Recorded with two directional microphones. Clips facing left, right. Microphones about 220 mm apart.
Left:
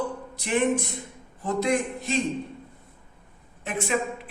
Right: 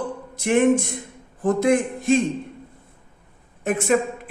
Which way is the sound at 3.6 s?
45° right (ahead or behind).